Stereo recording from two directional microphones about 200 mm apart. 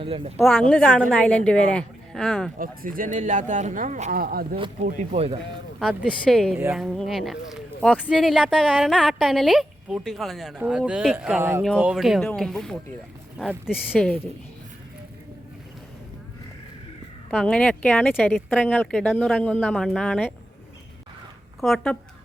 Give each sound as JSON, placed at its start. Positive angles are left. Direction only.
{"t": 0.0, "sound": "speech", "side_deg": -25}
{"t": 0.7, "sound": "a woman's voice", "side_deg": 5}
{"t": 2.6, "sound": "speech", "side_deg": -45}
{"t": 5.1, "sound": "speech", "side_deg": -30}
{"t": 5.4, "sound": "a woman's voice", "side_deg": 0}
{"t": 6.5, "sound": "a woman's voice", "side_deg": -10}
{"t": 6.7, "sound": "a woman's voice", "side_deg": 0}
{"t": 17.3, "sound": "a woman's voice", "side_deg": 5}
{"t": 21.6, "sound": "a woman's voice", "side_deg": 0}